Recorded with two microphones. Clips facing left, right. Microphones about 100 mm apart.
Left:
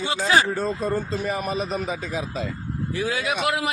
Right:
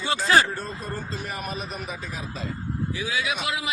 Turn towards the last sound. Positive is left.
turn(degrees=55)  # may be behind; listen again after turning